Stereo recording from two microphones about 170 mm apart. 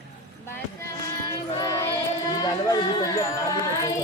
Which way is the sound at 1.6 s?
20° left (ahead or behind).